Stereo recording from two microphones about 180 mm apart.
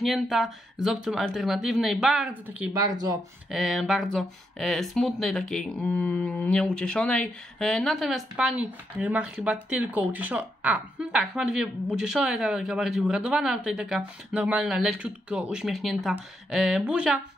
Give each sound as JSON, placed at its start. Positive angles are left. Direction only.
{"t": 0.0, "sound": "speech", "side_deg": 0}
{"t": 2.7, "sound": "speech", "side_deg": -20}
{"t": 3.5, "sound": "speech", "side_deg": 0}